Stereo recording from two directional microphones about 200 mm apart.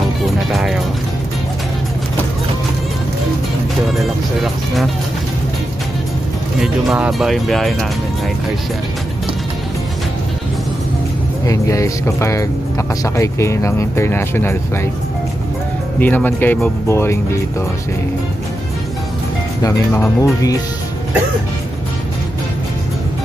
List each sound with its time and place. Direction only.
0.5 s speech: centre (ahead or behind)
3.9 s speech: centre (ahead or behind)
6.6 s speech: centre (ahead or behind)
11.4 s speech: 15° left (ahead or behind)
16.0 s speech: 10° left (ahead or behind)
19.6 s speech: 15° left (ahead or behind)